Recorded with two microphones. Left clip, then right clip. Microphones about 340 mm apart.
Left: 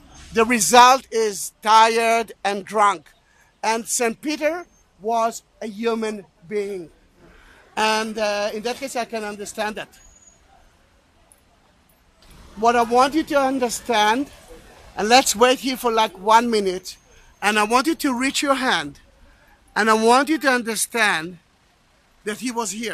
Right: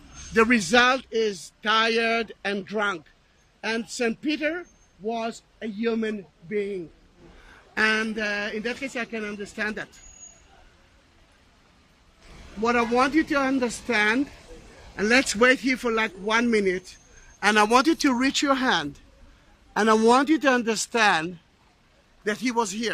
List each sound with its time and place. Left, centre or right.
0.3 s a man's voice: centre
7.7 s a man's voice: centre
12.6 s a man's voice: centre